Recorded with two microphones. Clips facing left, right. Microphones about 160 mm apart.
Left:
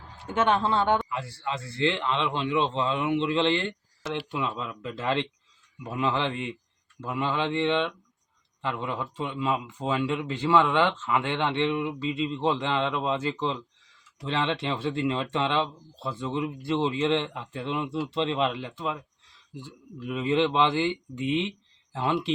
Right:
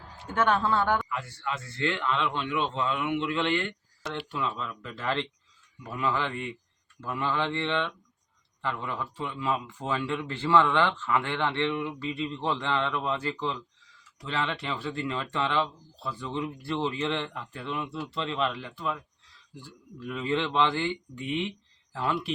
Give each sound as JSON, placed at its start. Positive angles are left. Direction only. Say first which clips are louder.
{"t": 0.3, "sound": "a man's voice", "louder": "left 1 dB", "side_deg": 20}
{"t": 4.3, "sound": "a man's voice", "louder": "left 2 dB", "side_deg": 20}